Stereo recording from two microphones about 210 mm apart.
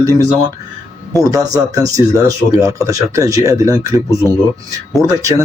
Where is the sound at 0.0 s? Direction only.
15° right (ahead or behind).